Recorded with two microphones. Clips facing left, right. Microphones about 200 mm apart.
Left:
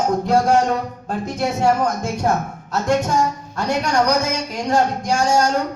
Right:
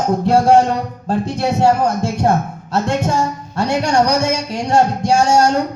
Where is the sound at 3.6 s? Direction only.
30° right (ahead or behind).